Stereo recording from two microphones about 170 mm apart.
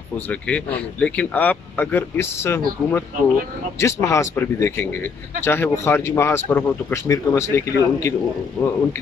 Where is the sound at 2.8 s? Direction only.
Centre (ahead or behind).